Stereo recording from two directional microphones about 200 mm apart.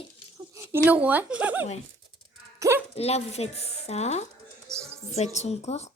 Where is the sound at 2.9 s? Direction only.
30° left (ahead or behind).